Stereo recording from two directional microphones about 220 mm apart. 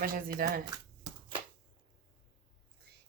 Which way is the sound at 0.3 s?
40° right (ahead or behind).